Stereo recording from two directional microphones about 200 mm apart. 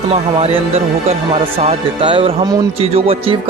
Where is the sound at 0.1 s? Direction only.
30° right (ahead or behind).